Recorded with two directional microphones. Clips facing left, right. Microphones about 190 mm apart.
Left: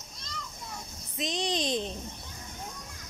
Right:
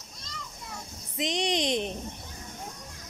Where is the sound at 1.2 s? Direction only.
20° right (ahead or behind).